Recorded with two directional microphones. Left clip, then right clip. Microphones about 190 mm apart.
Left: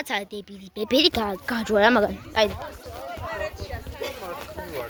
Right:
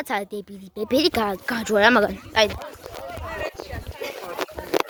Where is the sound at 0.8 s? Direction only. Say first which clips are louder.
Even; 10° right (ahead or behind).